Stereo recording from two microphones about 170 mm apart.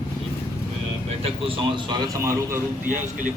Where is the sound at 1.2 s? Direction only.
30° right (ahead or behind).